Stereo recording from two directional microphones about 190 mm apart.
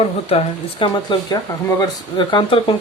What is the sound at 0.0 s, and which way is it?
Speech, 30° left (ahead or behind).